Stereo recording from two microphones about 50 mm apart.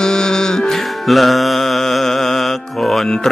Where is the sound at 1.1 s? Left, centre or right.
Centre.